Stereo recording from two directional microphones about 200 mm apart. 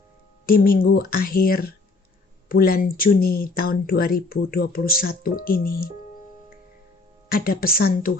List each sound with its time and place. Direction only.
0.4 s speech: 45° left (ahead or behind)
7.3 s speech: 45° left (ahead or behind)